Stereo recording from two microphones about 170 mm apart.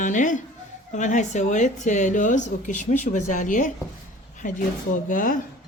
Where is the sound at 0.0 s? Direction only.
50° left (ahead or behind).